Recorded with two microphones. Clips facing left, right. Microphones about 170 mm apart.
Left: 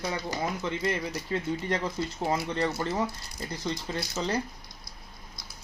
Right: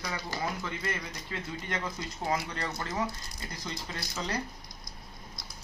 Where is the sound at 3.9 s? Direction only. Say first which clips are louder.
Left 4 dB; 25° left (ahead or behind).